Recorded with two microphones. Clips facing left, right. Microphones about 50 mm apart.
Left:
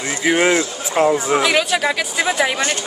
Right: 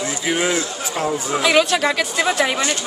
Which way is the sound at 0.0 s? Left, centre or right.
Left.